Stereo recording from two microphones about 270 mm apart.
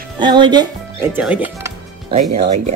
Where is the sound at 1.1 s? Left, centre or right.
Centre.